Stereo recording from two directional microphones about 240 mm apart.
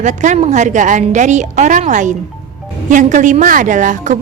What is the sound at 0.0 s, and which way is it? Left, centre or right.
A woman's voice, right.